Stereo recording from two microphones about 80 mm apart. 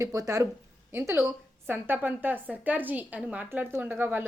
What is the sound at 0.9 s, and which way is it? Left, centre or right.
Speech, right.